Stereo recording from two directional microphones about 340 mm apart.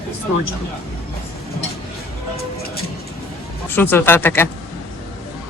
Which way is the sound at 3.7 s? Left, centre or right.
Centre.